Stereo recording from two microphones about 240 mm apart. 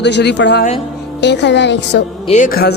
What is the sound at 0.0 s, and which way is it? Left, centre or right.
Speech, left.